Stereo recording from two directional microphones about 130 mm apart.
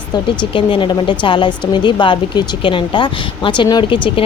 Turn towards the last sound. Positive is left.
turn(degrees=40)  # may be behind; listen again after turning